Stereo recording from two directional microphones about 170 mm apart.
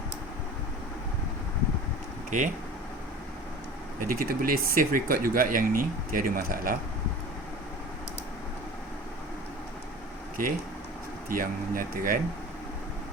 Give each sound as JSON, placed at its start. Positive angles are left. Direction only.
{"t": 2.3, "sound": "speech", "side_deg": -50}
{"t": 4.0, "sound": "speech", "side_deg": -60}
{"t": 11.3, "sound": "speech", "side_deg": -55}